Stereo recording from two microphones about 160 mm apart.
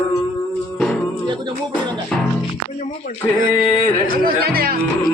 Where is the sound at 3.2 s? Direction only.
10° left (ahead or behind).